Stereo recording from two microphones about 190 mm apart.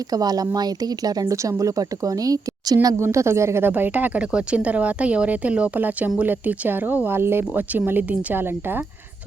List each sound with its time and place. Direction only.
0.1 s speech: 20° right (ahead or behind)